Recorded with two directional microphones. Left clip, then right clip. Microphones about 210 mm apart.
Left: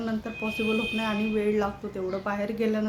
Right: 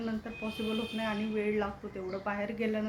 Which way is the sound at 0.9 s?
15° left (ahead or behind).